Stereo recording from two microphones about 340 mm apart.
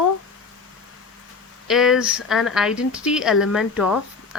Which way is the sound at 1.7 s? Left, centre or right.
Centre.